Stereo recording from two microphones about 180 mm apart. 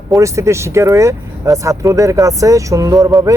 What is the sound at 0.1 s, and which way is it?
Speech, 15° right (ahead or behind).